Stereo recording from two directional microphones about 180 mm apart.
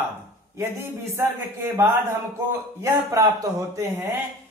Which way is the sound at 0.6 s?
15° right (ahead or behind).